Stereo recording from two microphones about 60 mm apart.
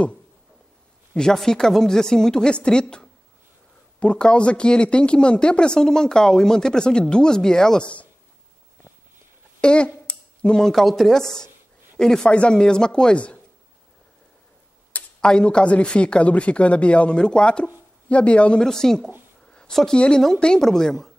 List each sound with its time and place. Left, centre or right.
1.1 s speech: centre
9.6 s speech: centre
10.0 s a sound: centre
10.7 s speech: centre
15.1 s speech: centre
18.7 s speech: centre
19.5 s a sound: centre
20.3 s speech: centre